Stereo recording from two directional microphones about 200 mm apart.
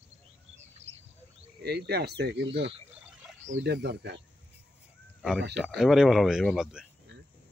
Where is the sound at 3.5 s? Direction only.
55° right (ahead or behind).